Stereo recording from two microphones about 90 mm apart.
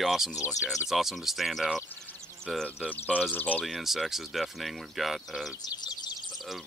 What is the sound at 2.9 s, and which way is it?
Speech, 15° left (ahead or behind).